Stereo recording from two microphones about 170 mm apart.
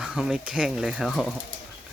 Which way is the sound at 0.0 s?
5° right (ahead or behind).